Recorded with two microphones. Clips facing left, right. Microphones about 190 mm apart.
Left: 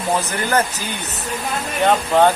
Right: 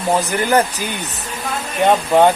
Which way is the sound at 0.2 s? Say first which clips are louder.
Right 4 dB; 15° right (ahead or behind).